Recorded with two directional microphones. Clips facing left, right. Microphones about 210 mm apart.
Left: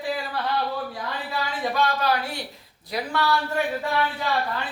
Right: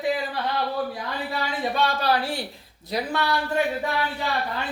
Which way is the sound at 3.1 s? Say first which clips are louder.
Left 2 dB; 20° right (ahead or behind).